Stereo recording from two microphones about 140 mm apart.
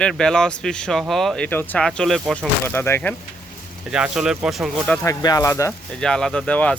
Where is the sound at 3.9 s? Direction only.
5° right (ahead or behind).